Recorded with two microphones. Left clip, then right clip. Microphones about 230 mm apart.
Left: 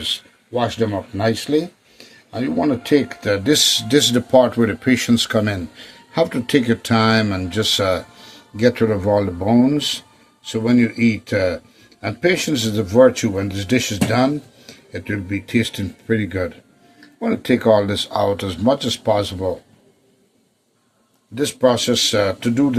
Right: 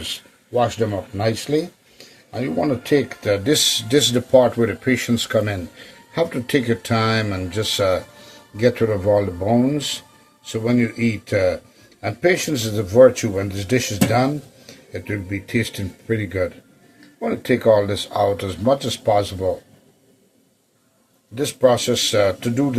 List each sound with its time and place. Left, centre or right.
0.0 s speech: left
21.3 s speech: left